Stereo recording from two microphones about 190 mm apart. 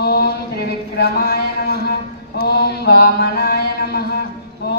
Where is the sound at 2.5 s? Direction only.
55° left (ahead or behind).